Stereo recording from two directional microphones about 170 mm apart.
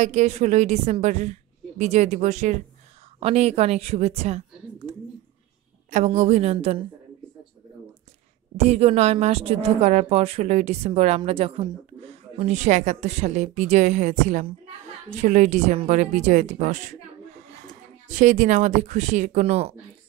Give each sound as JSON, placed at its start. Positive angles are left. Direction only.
{"t": 0.0, "sound": "a woman's voice", "side_deg": -40}
{"t": 8.5, "sound": "a woman's voice", "side_deg": -40}
{"t": 18.0, "sound": "a woman's voice", "side_deg": -45}